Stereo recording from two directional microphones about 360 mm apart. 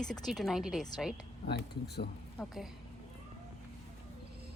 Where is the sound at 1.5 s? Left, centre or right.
Left.